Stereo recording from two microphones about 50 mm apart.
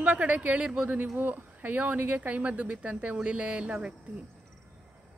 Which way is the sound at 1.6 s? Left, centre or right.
Right.